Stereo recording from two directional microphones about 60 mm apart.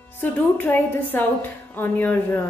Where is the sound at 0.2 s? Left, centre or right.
Left.